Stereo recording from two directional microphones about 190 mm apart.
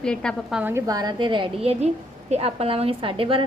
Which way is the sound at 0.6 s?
15° right (ahead or behind).